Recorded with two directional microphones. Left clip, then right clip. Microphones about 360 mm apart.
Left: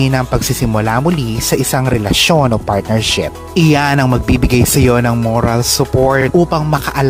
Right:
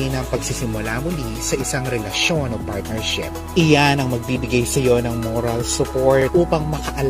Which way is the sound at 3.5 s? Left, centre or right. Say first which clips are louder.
Left 2 dB; left.